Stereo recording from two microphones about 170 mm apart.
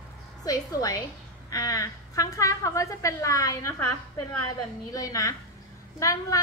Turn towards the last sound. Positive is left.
turn(degrees=20)  # may be behind; listen again after turning